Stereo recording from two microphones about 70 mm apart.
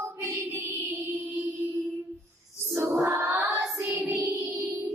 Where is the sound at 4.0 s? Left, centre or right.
Right.